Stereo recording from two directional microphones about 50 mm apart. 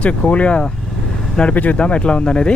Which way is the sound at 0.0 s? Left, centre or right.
Left.